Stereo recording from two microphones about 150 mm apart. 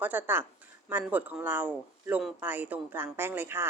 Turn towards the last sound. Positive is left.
turn(degrees=-15)  # may be behind; listen again after turning